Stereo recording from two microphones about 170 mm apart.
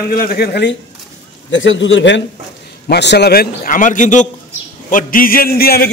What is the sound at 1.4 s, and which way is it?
A man's voice, 90° left.